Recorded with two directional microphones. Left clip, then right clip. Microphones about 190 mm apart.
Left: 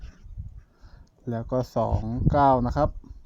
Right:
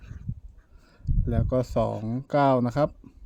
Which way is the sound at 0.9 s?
15° right (ahead or behind).